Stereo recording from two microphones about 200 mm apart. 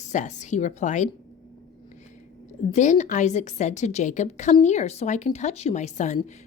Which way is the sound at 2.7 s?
35° left (ahead or behind).